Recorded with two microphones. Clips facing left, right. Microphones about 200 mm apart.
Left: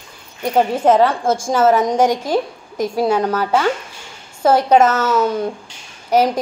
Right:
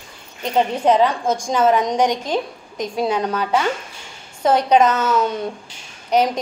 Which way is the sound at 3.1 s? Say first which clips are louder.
Left 3 dB; 50° left (ahead or behind).